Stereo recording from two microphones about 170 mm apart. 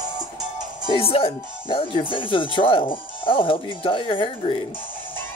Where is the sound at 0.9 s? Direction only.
35° left (ahead or behind).